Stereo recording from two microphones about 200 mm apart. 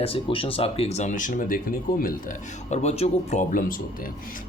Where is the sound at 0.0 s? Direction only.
25° left (ahead or behind); by 2.1 s 45° left (ahead or behind).